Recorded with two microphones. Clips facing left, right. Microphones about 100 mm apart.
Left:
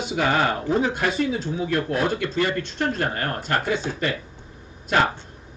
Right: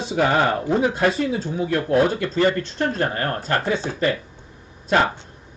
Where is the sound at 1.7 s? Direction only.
35° right (ahead or behind).